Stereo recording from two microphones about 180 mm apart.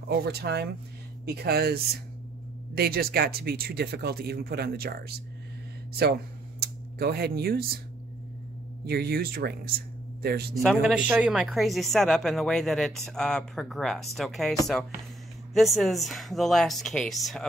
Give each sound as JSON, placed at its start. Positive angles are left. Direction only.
{"t": 0.1, "sound": "speech", "side_deg": -65}
{"t": 6.6, "sound": "speech", "side_deg": -60}
{"t": 8.8, "sound": "speech", "side_deg": -60}
{"t": 10.5, "sound": "speech", "side_deg": 0}